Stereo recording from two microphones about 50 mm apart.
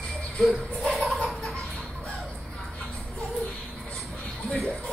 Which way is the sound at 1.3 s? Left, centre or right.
Centre.